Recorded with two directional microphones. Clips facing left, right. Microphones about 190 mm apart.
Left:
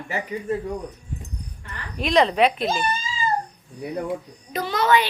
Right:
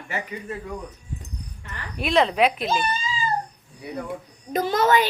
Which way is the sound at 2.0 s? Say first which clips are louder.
Left 1 dB; 5° right (ahead or behind).